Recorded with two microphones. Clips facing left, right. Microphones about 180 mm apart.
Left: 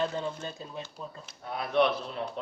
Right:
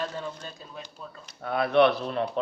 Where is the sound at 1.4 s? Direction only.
65° right (ahead or behind).